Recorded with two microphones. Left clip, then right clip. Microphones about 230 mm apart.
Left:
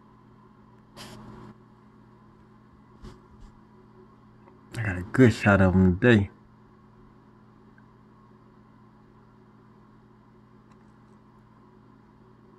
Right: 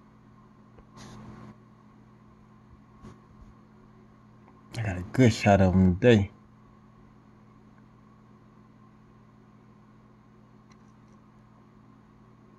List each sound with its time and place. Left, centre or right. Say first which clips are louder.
4.6 s speech: left 3 dB; centre